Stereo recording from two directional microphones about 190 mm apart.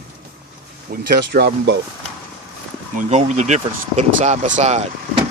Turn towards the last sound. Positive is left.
turn(degrees=-35)  # may be behind; listen again after turning